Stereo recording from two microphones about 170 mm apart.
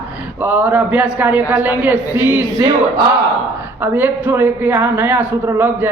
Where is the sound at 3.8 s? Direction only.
10° right (ahead or behind).